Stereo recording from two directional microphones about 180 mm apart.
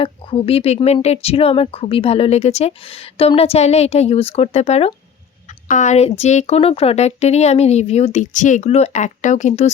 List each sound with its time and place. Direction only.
0.0 s speech: 30° left (ahead or behind)